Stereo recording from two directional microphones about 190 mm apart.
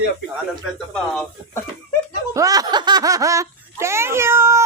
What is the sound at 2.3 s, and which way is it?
Speech, 20° right (ahead or behind).